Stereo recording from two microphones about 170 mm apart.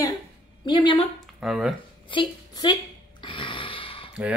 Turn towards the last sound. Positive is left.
turn(degrees=30)  # may be behind; listen again after turning